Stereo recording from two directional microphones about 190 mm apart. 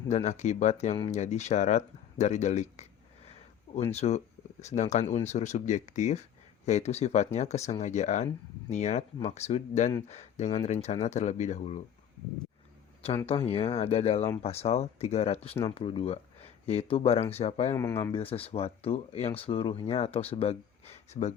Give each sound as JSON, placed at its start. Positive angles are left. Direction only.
{"t": 0.1, "sound": "speech", "side_deg": 35}
{"t": 3.9, "sound": "speech", "side_deg": 35}
{"t": 13.2, "sound": "speech", "side_deg": 30}
{"t": 17.7, "sound": "speech", "side_deg": 15}
{"t": 18.1, "sound": "speech", "side_deg": 30}